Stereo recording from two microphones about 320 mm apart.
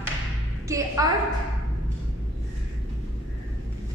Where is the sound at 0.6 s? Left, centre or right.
Centre.